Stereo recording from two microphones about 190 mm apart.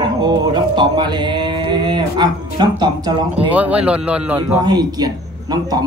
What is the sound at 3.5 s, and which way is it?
A man's voice, 5° right (ahead or behind).